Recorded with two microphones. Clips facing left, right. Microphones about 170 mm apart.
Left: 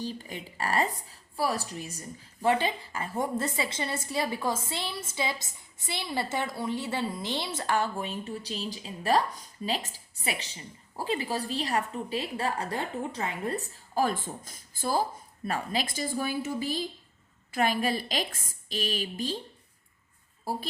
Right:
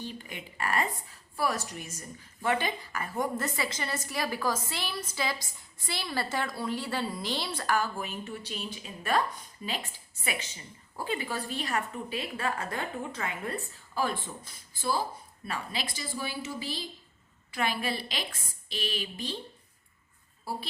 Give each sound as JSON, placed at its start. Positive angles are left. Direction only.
{"t": 0.0, "sound": "a woman's voice", "side_deg": 35}
{"t": 20.4, "sound": "speech", "side_deg": 45}